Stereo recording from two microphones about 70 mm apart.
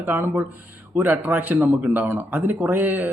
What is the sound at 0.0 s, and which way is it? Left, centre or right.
Speech, right.